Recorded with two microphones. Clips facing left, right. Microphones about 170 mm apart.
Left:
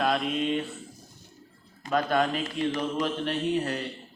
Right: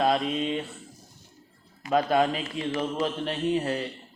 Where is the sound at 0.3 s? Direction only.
Centre (ahead or behind).